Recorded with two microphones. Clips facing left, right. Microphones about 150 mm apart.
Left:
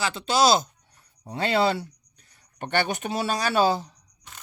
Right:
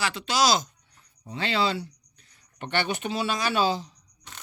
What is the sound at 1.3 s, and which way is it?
Speech, 50° left (ahead or behind).